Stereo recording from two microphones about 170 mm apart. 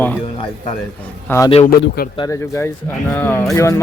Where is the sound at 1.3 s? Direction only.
15° left (ahead or behind).